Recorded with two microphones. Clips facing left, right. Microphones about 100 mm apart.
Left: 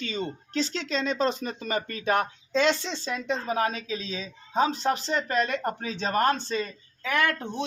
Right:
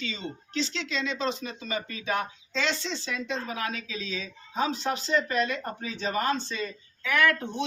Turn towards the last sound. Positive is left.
turn(degrees=30)  # may be behind; listen again after turning